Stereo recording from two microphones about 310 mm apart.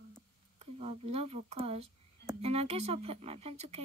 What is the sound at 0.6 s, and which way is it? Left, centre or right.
Speech, centre.